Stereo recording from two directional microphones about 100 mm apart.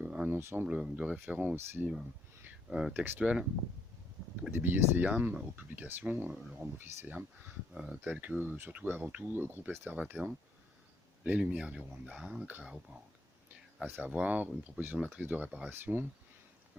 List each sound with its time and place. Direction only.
0.0 s a sound: 15° right (ahead or behind)
0.3 s speech: 25° right (ahead or behind)
0.6 s speech: 10° right (ahead or behind)
2.6 s speech: 5° right (ahead or behind)
4.5 s speech: 20° right (ahead or behind)
7.7 s speech: 10° right (ahead or behind)
13.8 s speech: 15° right (ahead or behind)